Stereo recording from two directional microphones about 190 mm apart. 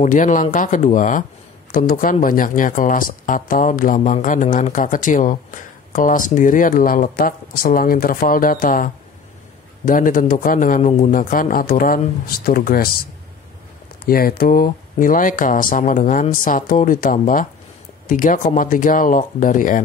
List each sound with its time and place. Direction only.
0.0 s speech: 45° left (ahead or behind)
14.0 s speech: 50° left (ahead or behind)